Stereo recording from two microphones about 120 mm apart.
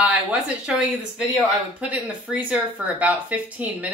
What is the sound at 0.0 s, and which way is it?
Speech, 10° right (ahead or behind).